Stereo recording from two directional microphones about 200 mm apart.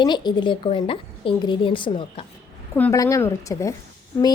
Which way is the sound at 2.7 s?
10° left (ahead or behind).